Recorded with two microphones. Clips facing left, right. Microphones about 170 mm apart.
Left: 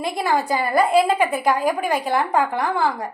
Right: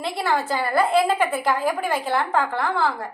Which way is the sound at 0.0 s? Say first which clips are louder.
Left 2 dB; 15° left (ahead or behind).